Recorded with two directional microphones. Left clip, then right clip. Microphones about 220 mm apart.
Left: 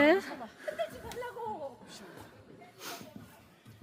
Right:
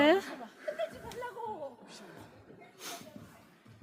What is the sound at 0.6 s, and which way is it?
Laughter, 50° left (ahead or behind).